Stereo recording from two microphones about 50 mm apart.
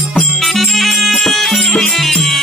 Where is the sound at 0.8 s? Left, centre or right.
Centre.